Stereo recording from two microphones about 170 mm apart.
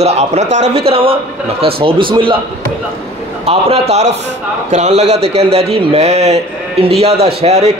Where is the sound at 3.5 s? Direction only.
35° right (ahead or behind).